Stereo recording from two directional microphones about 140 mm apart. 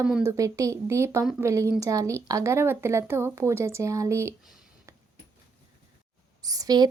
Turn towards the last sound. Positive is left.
turn(degrees=-30)  # may be behind; listen again after turning